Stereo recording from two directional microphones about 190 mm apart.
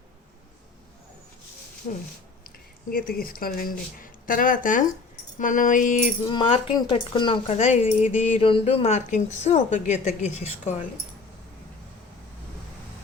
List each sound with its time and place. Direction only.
2.9 s speech: 50° left (ahead or behind)
6.2 s speech: 25° left (ahead or behind)